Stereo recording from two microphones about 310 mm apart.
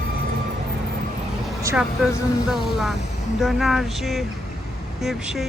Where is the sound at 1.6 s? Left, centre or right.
Centre.